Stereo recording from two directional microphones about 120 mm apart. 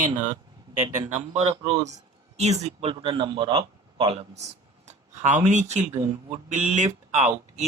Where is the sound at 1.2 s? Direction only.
65° right (ahead or behind).